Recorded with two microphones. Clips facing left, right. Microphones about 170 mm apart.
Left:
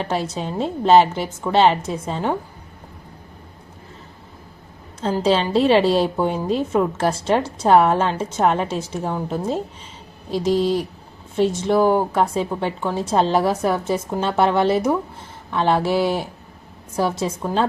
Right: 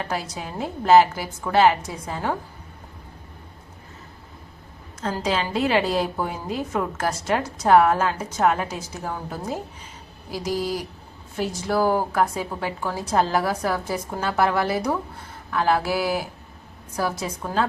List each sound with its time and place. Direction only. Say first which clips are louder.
0.0 s a woman's voice: left 5 dB; 25° left (ahead or behind)
5.2 s a woman's voice: left 7 dB; 30° left (ahead or behind)